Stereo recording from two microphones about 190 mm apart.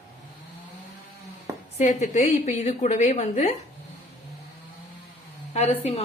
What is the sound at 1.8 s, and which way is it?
A woman's voice, 40° left (ahead or behind).